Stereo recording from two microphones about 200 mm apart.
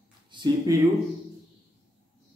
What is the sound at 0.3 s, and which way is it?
Speech, 20° right (ahead or behind).